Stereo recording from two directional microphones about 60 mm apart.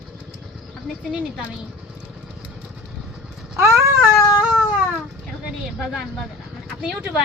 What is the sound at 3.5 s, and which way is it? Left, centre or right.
Baby cry, right.